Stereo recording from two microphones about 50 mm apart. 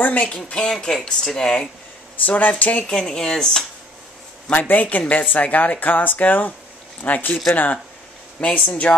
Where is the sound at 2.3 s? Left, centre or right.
Left.